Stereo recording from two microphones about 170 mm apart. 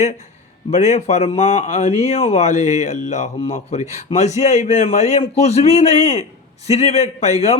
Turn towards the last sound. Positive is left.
turn(degrees=40)  # may be behind; listen again after turning